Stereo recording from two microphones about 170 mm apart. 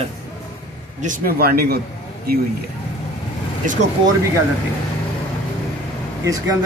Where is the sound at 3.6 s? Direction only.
50° right (ahead or behind).